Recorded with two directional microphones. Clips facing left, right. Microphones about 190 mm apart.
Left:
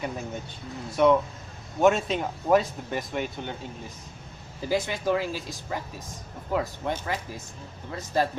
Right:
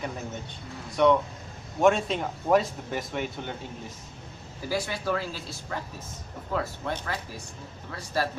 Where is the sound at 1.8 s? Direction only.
Centre (ahead or behind).